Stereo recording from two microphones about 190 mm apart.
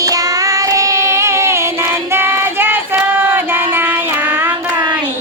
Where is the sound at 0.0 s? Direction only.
20° right (ahead or behind).